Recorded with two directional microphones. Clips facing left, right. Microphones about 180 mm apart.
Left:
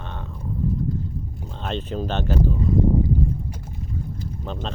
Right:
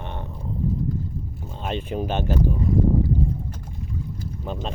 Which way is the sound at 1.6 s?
10° right (ahead or behind).